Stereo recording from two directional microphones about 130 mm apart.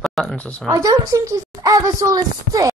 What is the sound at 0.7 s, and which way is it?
A woman's voice, 25° right (ahead or behind).